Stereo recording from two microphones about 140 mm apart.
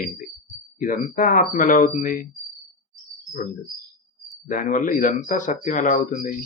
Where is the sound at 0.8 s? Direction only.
75° left (ahead or behind).